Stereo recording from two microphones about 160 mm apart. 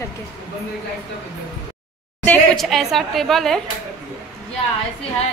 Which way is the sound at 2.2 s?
5° left (ahead or behind).